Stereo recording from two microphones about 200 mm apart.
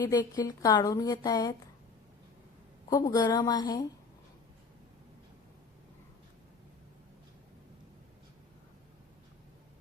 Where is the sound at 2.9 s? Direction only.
15° left (ahead or behind).